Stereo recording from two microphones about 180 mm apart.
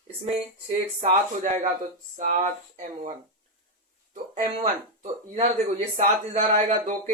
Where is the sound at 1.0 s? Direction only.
40° right (ahead or behind).